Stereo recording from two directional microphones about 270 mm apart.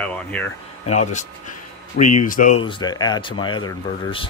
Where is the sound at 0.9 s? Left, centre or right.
Left.